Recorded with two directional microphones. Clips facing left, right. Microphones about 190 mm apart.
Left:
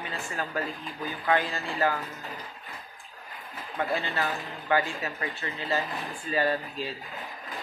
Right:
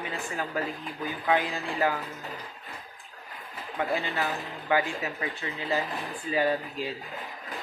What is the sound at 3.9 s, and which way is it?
Speech, 15° right (ahead or behind).